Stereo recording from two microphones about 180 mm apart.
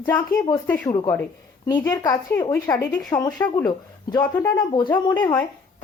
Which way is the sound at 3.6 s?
20° left (ahead or behind).